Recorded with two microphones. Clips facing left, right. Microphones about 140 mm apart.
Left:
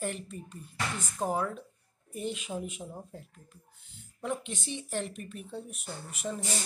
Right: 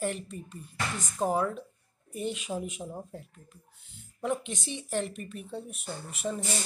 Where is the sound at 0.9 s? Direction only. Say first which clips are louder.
Right 4 dB; 15° right (ahead or behind).